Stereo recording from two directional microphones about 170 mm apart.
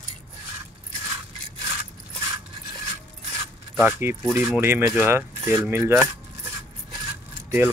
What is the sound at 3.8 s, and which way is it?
Speech, 10° right (ahead or behind).